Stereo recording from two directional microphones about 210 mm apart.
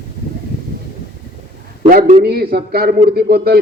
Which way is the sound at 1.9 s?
45° right (ahead or behind).